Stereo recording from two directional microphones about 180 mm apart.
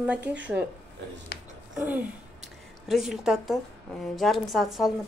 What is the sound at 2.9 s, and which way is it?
A woman's voice, centre (ahead or behind).